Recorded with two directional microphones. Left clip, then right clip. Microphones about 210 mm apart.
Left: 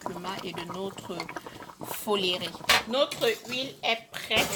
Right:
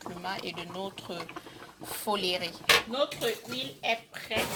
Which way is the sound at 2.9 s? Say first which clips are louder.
Left 4 dB; 35° left (ahead or behind).